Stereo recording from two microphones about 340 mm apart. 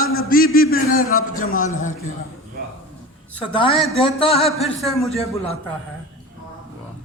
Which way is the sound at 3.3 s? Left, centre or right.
Centre.